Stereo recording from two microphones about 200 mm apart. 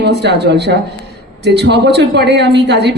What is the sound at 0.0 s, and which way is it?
A woman's voice, 55° right (ahead or behind).